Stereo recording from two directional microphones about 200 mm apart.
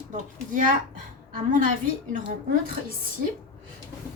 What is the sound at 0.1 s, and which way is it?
Speech, 40° right (ahead or behind).